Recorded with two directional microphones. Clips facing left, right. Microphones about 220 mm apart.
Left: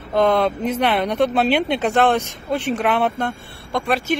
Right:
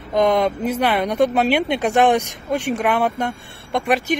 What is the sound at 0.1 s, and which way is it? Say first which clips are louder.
Speech: even; 15° right (ahead or behind).